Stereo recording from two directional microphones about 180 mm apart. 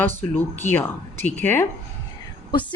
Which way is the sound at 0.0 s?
10° left (ahead or behind).